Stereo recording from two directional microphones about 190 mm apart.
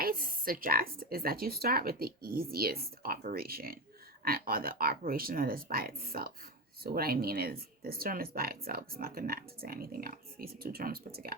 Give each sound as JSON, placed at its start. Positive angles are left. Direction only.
{"t": 0.0, "sound": "speech", "side_deg": -50}